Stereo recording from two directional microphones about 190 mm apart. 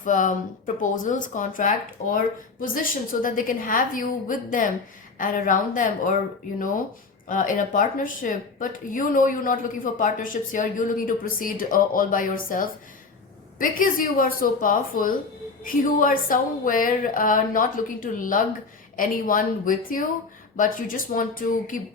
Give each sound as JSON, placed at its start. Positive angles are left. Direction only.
{"t": 0.0, "sound": "speech", "side_deg": 45}
{"t": 7.3, "sound": "speech", "side_deg": 45}